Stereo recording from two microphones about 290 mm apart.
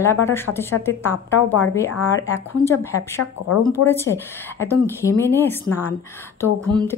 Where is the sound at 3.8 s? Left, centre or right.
Left.